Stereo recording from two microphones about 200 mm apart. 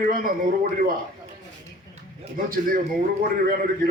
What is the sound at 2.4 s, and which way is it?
Speech, 45° right (ahead or behind).